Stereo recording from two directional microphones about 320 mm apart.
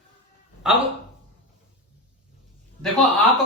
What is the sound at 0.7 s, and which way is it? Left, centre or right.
Speech, centre.